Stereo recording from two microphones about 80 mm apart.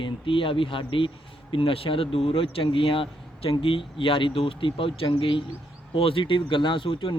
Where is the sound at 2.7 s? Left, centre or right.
Left.